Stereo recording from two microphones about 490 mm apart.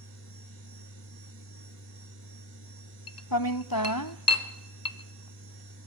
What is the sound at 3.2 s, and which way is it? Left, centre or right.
Cutlery, left.